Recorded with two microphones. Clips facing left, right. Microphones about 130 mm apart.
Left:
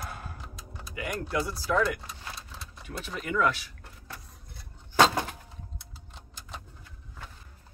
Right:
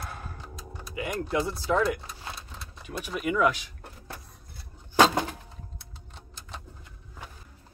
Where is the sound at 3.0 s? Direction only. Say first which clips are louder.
Right 3 dB; 15° right (ahead or behind).